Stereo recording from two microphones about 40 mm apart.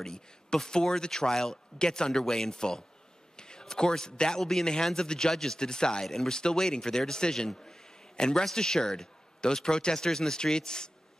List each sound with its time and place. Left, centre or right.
0.0 s a man's voice: centre